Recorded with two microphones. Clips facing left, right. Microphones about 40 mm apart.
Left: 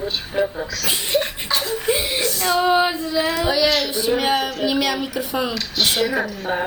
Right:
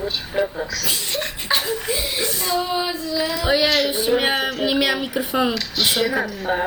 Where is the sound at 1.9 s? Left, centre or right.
Left.